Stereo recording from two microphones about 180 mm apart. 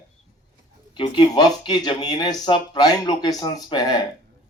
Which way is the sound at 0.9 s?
25° left (ahead or behind).